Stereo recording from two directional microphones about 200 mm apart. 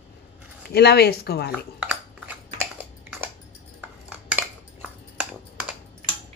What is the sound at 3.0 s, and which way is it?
Biting, 10° right (ahead or behind).